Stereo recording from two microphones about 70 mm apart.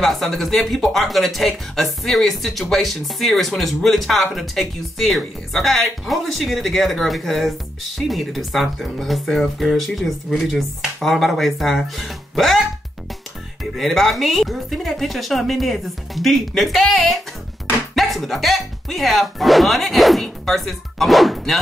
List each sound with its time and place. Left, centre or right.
0.0 s speech: centre
13.7 s speech: centre